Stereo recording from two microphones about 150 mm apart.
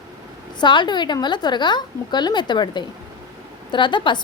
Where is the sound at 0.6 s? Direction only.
30° left (ahead or behind).